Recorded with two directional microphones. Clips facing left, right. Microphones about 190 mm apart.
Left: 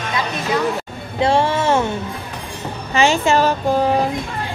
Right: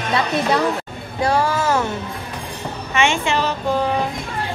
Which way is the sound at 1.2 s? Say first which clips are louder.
Left 2 dB; 25° left (ahead or behind).